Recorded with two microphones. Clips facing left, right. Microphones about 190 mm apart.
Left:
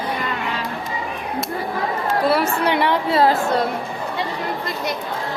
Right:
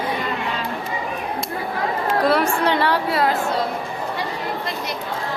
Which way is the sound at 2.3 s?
10° left (ahead or behind).